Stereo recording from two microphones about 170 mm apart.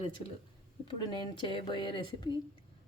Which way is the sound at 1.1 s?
25° left (ahead or behind).